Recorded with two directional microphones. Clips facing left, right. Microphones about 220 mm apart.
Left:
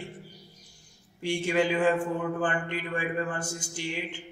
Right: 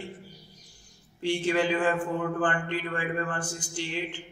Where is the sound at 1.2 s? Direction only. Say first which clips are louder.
Even; 10° left (ahead or behind).